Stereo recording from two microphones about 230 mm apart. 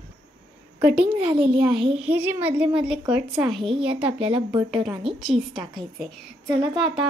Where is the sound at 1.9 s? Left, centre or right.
Centre.